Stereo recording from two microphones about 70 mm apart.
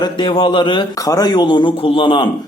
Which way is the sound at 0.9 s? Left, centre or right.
Left.